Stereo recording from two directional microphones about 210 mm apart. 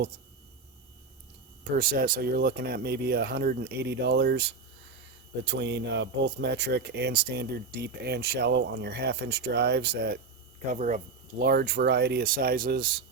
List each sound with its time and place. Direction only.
1.7 s speech: 45° right (ahead or behind)
10.7 s speech: 35° right (ahead or behind)